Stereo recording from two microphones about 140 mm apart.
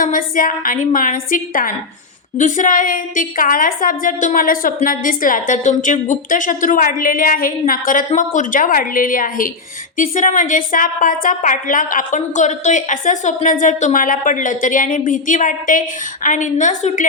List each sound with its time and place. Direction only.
0.0 s a woman's voice: 75° left (ahead or behind)
2.4 s a woman's voice: 70° left (ahead or behind)
10.0 s a woman's voice: 65° left (ahead or behind)